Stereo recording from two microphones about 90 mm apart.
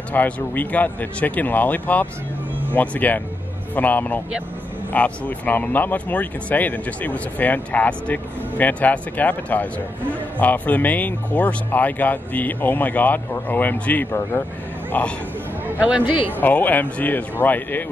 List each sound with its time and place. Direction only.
0.1 s a man's voice: 20° left (ahead or behind)
15.6 s speech: 20° right (ahead or behind)
16.3 s speech: 20° left (ahead or behind)